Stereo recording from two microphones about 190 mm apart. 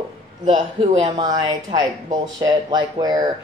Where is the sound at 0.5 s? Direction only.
25° right (ahead or behind).